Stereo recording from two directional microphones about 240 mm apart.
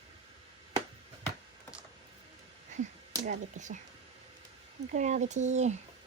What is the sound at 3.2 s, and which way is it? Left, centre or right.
Speech, right.